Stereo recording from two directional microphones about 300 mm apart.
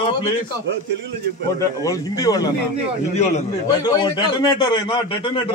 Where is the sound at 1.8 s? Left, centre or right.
Centre.